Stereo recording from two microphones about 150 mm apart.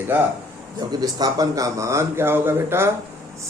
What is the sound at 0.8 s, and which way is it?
Speech, 25° right (ahead or behind).